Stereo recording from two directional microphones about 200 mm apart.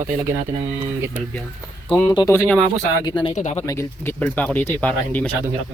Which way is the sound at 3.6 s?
10° left (ahead or behind).